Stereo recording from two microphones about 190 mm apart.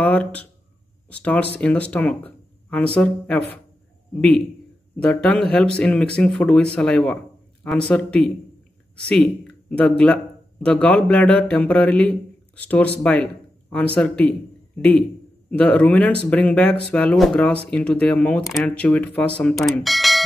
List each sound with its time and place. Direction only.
0.0 s a man's voice: 5° left (ahead or behind)
15.5 s speech: 10° left (ahead or behind)